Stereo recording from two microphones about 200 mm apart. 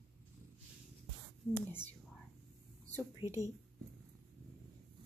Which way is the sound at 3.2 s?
15° right (ahead or behind).